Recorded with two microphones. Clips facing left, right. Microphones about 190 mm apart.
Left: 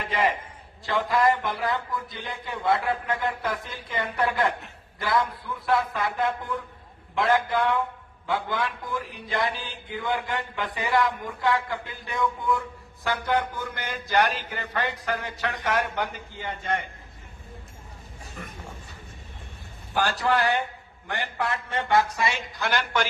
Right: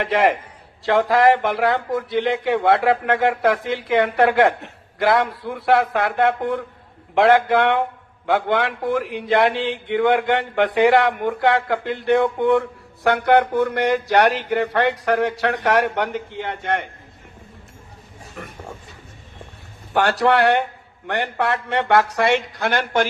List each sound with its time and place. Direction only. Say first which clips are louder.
0.0 s a man's voice: right 8 dB; 85° right; by 16.8 s 70° right (ahead or behind)
18.4 s a sound: right 5 dB; 70° right (ahead or behind)
19.9 s speech: right 7 dB; 70° right (ahead or behind); by 23.0 s 55° right (ahead or behind)